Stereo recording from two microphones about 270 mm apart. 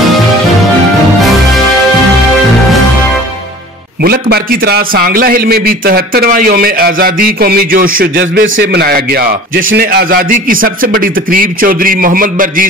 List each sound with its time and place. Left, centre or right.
4.0 s a man's voice: right